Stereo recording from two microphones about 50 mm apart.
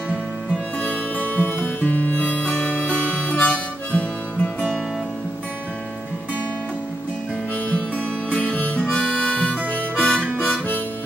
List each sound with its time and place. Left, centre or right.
0.8 s music: left
8.3 s harmonica: centre